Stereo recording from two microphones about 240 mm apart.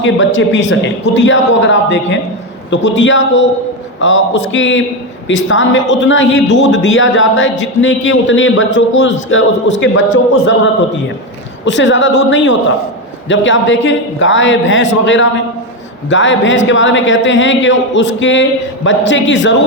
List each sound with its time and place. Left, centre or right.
0.0 s a man's voice: left
11.6 s a man's voice: left